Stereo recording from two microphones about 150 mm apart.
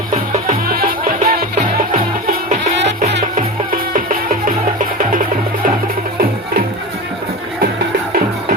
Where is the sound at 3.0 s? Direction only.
65° right (ahead or behind).